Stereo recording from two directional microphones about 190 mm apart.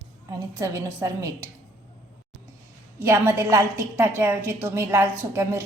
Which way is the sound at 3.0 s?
15° right (ahead or behind).